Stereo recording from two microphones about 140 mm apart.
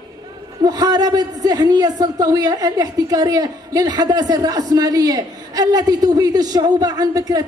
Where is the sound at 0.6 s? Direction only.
30° right (ahead or behind).